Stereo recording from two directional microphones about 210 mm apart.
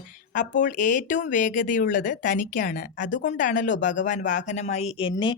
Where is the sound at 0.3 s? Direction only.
35° left (ahead or behind).